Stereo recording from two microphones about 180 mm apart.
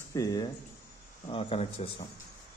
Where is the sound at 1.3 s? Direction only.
30° left (ahead or behind).